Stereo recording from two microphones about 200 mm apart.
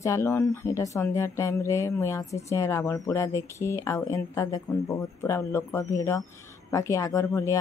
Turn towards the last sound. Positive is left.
turn(degrees=15)  # may be behind; listen again after turning